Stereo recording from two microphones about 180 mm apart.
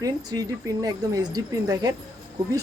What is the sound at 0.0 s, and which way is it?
Speech, 20° right (ahead or behind).